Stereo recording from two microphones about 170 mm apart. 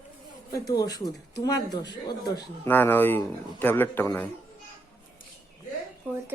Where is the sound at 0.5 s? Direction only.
20° left (ahead or behind).